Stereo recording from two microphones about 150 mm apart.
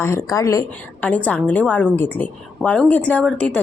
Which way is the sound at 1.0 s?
10° left (ahead or behind).